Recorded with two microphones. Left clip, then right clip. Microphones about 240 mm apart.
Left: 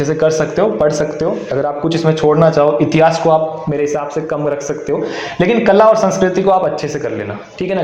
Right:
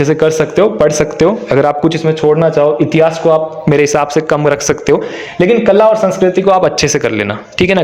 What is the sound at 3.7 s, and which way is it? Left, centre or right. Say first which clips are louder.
A man's voice: right 7 dB; right.